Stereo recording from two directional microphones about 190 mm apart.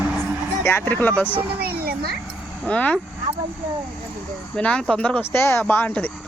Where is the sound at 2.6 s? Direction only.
5° left (ahead or behind).